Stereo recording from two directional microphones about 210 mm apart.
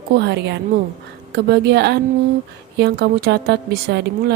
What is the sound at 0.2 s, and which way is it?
A woman's voice, 55° right (ahead or behind).